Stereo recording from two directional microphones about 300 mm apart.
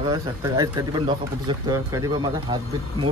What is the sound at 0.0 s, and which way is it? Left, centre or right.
Speech, centre.